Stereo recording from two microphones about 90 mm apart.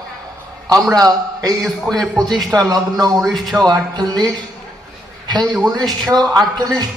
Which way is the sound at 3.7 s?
50° right (ahead or behind).